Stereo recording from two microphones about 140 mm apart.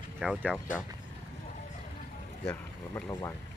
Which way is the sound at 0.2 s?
5° right (ahead or behind).